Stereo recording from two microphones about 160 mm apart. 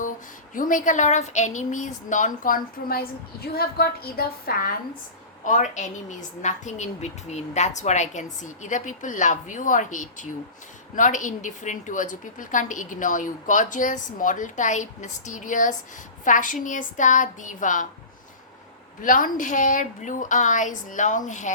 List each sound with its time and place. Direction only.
0.5 s speech: 55° left (ahead or behind)
5.5 s a woman's voice: 50° left (ahead or behind)
19.0 s a woman's voice: 55° left (ahead or behind)